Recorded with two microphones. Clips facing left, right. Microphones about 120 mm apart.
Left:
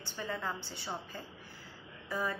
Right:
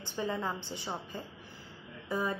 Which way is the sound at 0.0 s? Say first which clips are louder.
Right 4 dB; 20° right (ahead or behind).